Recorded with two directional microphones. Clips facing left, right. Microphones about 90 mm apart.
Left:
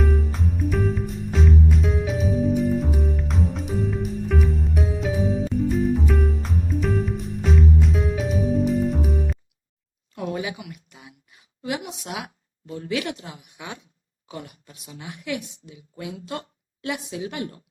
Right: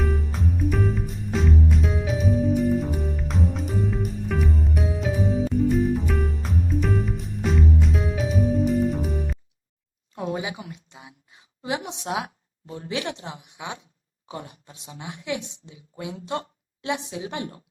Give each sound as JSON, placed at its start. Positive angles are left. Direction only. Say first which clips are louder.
{"t": 0.0, "sound": "music", "louder": "left 2 dB", "side_deg": 0}
{"t": 10.2, "sound": "a sound", "louder": "even", "side_deg": -25}
{"t": 14.3, "sound": "a woman's voice", "louder": "right 1 dB", "side_deg": -25}